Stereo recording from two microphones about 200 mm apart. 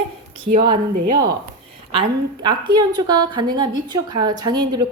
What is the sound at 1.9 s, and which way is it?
A woman's voice, 25° right (ahead or behind).